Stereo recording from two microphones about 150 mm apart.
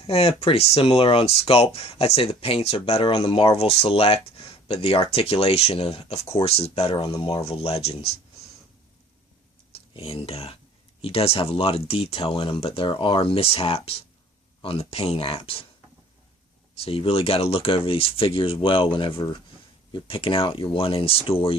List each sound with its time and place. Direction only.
0.1 s speech: 40° left (ahead or behind)
9.7 s speech: 40° left (ahead or behind)
16.7 s speech: 40° left (ahead or behind)